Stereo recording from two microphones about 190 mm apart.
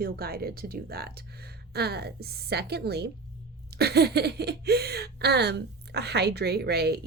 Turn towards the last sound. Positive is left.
turn(degrees=-60)  # may be behind; listen again after turning